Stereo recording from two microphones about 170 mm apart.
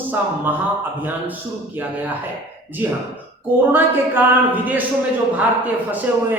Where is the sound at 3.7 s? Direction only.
10° right (ahead or behind).